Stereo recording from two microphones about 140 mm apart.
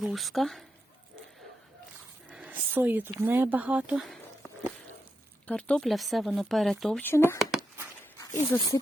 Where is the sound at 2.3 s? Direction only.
10° right (ahead or behind).